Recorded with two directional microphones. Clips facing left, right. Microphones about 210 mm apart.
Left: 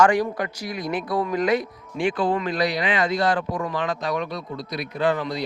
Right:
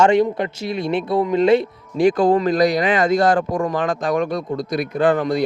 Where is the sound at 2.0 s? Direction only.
40° right (ahead or behind).